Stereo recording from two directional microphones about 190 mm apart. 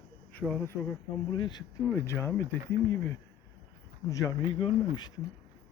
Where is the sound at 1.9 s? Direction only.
15° left (ahead or behind).